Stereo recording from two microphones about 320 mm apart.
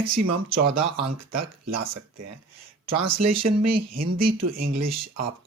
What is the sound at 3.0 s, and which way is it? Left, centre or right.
Speech, right.